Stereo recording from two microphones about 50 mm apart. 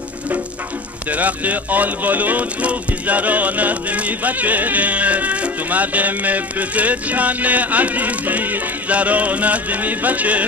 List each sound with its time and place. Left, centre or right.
1.1 s speech: right